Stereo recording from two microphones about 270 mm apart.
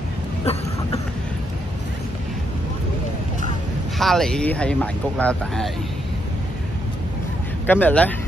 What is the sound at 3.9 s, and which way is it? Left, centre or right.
Speech, centre.